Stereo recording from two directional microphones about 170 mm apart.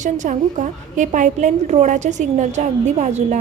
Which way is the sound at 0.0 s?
45° right (ahead or behind).